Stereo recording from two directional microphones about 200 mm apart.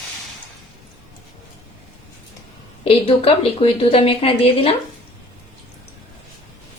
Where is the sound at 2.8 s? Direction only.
30° left (ahead or behind).